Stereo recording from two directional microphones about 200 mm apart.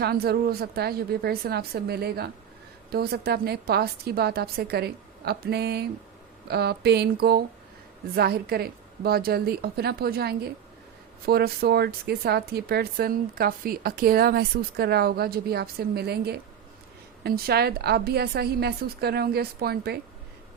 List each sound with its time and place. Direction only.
0.0 s speech: 50° right (ahead or behind)